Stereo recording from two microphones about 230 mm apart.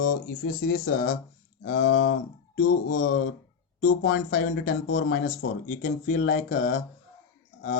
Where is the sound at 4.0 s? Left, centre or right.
Left.